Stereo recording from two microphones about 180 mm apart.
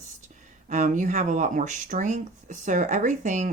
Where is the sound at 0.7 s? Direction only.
45° right (ahead or behind).